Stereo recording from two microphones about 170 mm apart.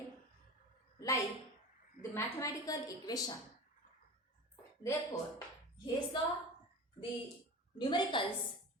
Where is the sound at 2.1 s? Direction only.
20° left (ahead or behind).